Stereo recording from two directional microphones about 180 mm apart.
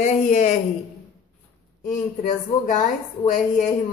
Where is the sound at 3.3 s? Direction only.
45° left (ahead or behind).